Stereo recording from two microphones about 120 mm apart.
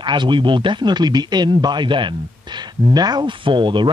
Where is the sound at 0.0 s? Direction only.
40° right (ahead or behind).